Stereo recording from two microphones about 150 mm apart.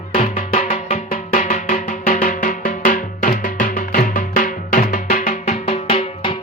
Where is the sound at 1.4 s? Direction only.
55° left (ahead or behind).